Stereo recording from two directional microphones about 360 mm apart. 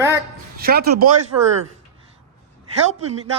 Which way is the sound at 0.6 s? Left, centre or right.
Right.